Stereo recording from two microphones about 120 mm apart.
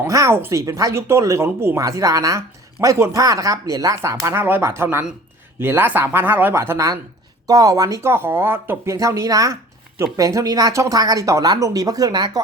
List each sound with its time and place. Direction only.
0.1 s a woman's voice: 25° right (ahead or behind)